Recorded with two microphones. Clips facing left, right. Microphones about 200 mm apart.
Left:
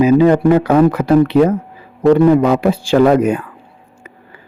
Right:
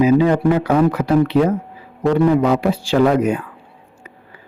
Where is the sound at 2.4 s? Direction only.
50° left (ahead or behind).